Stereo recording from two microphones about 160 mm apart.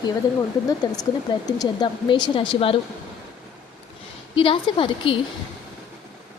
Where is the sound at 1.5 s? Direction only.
25° left (ahead or behind).